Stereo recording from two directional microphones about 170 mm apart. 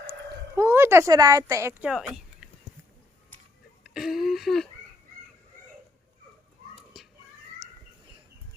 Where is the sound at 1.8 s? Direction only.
5° right (ahead or behind).